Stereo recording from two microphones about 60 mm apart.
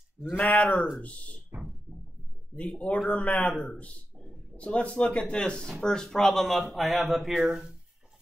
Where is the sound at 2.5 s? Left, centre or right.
Left; by 7.3 s centre.